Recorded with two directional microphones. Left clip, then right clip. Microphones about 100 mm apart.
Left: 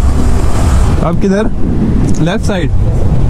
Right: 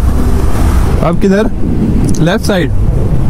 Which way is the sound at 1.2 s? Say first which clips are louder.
Right 2 dB; 10° right (ahead or behind).